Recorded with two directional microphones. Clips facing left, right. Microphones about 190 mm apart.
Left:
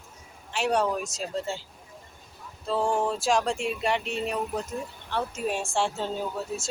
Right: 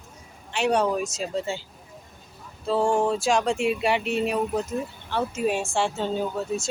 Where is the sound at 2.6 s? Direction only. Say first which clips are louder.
Right 4 dB; centre (ahead or behind).